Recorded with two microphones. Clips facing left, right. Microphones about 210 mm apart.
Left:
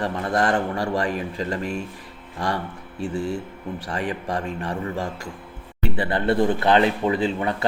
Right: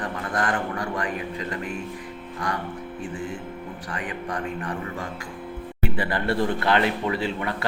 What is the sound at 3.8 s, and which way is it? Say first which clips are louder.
A man's voice: left 4 dB; 25° left (ahead or behind).